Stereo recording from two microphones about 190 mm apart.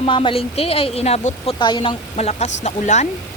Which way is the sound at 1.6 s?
25° left (ahead or behind).